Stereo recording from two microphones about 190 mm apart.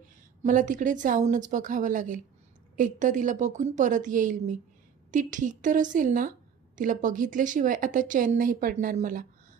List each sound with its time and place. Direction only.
0.4 s a woman's voice: 40° right (ahead or behind)